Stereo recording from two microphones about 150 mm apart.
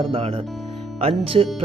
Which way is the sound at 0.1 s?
40° right (ahead or behind).